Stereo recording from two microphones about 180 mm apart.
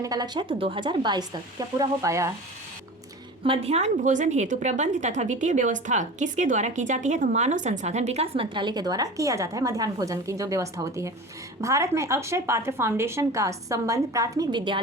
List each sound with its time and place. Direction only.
0.0 s speech: 20° right (ahead or behind)
3.4 s a woman's voice: 30° right (ahead or behind)